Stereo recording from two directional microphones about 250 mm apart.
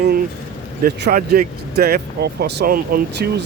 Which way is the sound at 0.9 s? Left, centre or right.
Right.